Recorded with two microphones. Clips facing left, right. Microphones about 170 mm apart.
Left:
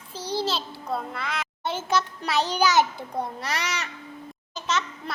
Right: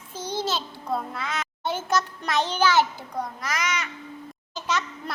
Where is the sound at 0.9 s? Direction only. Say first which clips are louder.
Right 1 dB; centre (ahead or behind).